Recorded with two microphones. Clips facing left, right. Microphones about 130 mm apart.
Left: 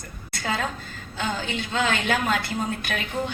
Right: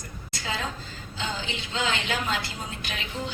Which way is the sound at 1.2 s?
50° left (ahead or behind).